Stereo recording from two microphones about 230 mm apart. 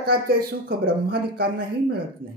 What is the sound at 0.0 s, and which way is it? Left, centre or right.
Speech, right.